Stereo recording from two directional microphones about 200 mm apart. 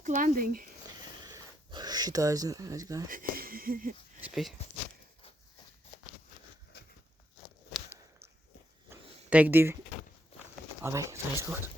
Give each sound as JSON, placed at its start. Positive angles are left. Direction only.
{"t": 0.0, "sound": "speech", "side_deg": -40}
{"t": 1.3, "sound": "a sound", "side_deg": -20}
{"t": 3.1, "sound": "speech", "side_deg": -45}
{"t": 4.2, "sound": "speech", "side_deg": 0}
{"t": 8.9, "sound": "a sound", "side_deg": -10}
{"t": 10.8, "sound": "speech", "side_deg": -15}